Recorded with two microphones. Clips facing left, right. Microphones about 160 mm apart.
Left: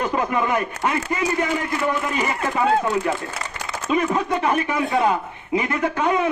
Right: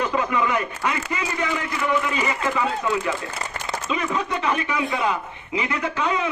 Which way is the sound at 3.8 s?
45° left (ahead or behind).